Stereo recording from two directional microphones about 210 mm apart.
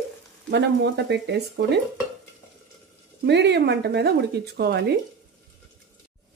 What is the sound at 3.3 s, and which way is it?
Speech, 55° right (ahead or behind).